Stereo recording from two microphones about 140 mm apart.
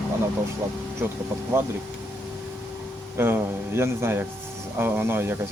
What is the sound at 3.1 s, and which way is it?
Speech, 15° right (ahead or behind).